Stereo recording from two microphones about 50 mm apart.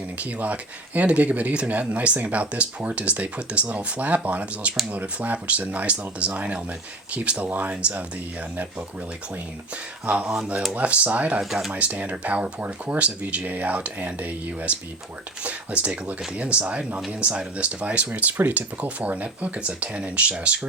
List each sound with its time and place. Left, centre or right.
0.2 s speech: right
10.1 s speech: right
11.3 s speech: centre
11.7 s speech: right